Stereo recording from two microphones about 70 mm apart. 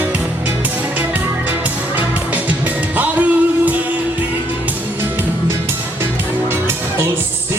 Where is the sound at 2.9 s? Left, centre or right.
Right.